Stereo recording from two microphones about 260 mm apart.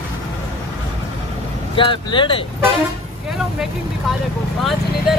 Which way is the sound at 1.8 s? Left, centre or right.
Centre.